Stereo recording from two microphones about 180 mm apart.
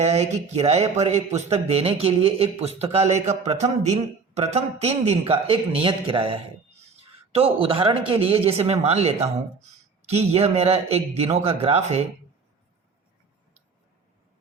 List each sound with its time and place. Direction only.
0.0 s speech: 35° right (ahead or behind)